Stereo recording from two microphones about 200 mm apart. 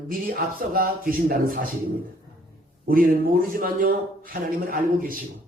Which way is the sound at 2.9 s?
45° right (ahead or behind).